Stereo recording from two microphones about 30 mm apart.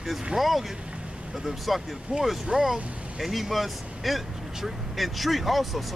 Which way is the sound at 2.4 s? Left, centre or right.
Right.